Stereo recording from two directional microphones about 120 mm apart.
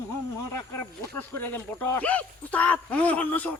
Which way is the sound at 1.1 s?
15° left (ahead or behind).